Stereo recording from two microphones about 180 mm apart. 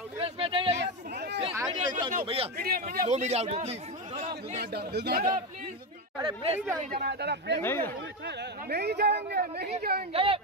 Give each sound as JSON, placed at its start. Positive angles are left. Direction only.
{"t": 0.2, "sound": "a sound", "side_deg": -30}
{"t": 0.7, "sound": "a sound", "side_deg": -70}
{"t": 1.5, "sound": "a sound", "side_deg": -20}
{"t": 2.2, "sound": "speech", "side_deg": -30}
{"t": 2.5, "sound": "speech", "side_deg": -55}
{"t": 2.9, "sound": "speech", "side_deg": -45}
{"t": 4.6, "sound": "speech", "side_deg": -65}
{"t": 6.2, "sound": "speech", "side_deg": -35}
{"t": 6.8, "sound": "speech", "side_deg": -60}
{"t": 7.6, "sound": "speech", "side_deg": 10}
{"t": 8.3, "sound": "speech", "side_deg": -65}
{"t": 10.1, "sound": "speech", "side_deg": -30}